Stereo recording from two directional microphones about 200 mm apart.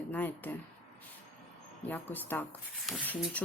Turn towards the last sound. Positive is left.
turn(degrees=5)  # may be behind; listen again after turning